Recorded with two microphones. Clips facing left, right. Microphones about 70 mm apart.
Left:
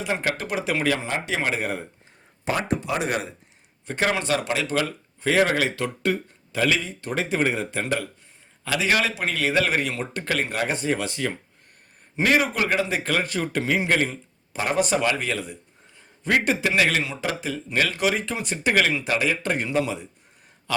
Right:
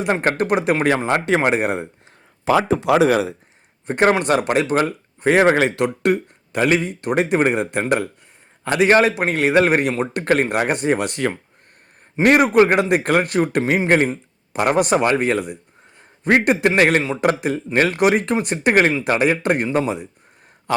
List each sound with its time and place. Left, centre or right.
0.0 s speech: right
2.9 s speech: right
3.8 s a man's voice: right
6.6 s a man's voice: right
17.2 s a man's voice: right
19.6 s a man's voice: right
20.7 s a sound: right